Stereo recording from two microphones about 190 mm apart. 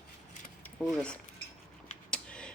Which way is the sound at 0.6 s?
5° left (ahead or behind).